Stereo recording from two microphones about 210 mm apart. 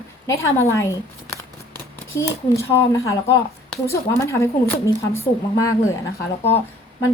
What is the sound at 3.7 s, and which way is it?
A woman's voice, 10° left (ahead or behind).